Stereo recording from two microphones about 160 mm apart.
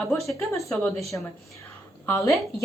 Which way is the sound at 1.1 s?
15° left (ahead or behind).